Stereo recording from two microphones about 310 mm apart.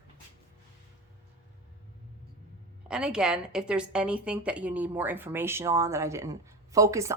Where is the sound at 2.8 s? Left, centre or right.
Centre.